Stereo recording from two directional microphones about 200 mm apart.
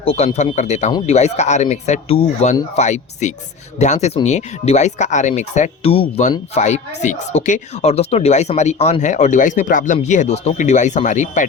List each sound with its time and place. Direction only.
0.0 s speech: 30° left (ahead or behind)